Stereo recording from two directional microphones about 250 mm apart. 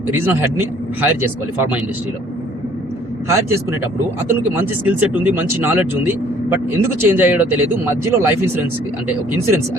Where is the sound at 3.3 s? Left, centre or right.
Centre.